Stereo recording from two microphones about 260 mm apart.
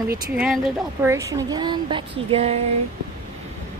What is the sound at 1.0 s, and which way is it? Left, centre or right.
Speech, centre.